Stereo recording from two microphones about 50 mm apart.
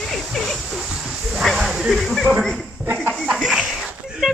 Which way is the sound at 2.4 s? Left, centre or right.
Centre.